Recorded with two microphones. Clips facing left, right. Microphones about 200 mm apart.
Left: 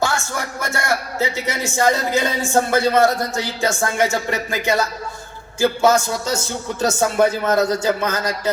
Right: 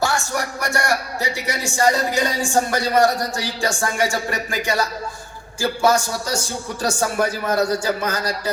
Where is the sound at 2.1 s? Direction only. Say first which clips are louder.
Left 2 dB; 15° right (ahead or behind).